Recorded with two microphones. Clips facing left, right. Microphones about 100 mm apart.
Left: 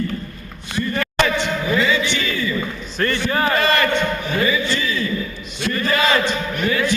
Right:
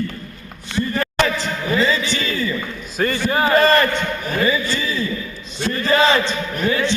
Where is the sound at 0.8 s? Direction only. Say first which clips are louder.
Right 1 dB; 35° right (ahead or behind).